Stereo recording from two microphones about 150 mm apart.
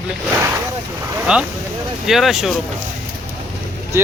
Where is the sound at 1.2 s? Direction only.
5° right (ahead or behind).